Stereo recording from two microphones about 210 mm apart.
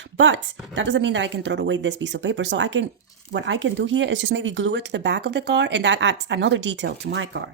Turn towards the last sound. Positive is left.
turn(degrees=-55)  # may be behind; listen again after turning